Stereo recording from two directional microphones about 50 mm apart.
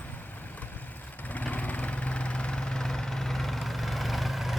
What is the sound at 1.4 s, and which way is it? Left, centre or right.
Vehicle, left.